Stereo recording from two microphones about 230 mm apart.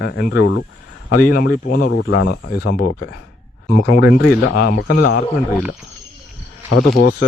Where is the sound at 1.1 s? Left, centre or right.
Left.